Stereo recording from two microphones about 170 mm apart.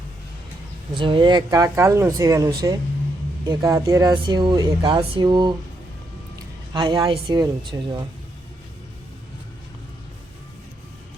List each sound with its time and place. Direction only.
0.9 s speech: 30° right (ahead or behind)
6.7 s speech: 25° right (ahead or behind)